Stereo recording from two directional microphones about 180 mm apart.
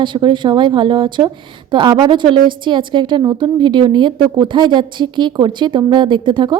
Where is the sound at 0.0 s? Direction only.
25° right (ahead or behind).